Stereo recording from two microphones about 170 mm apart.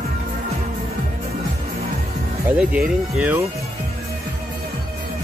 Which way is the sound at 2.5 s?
5° right (ahead or behind).